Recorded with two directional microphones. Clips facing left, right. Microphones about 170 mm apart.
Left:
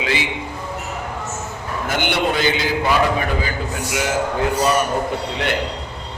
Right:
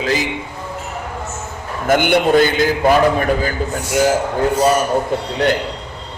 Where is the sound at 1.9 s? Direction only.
50° right (ahead or behind).